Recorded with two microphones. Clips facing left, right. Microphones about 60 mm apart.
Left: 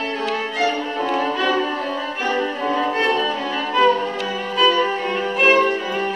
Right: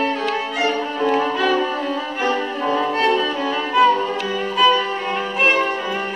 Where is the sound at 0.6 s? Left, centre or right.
Centre.